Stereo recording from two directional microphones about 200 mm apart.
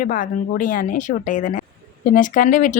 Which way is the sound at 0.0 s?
40° left (ahead or behind).